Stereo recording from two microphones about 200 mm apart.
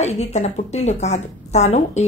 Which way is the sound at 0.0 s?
35° left (ahead or behind).